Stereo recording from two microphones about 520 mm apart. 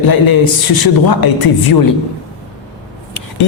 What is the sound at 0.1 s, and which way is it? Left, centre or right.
A man's voice, left.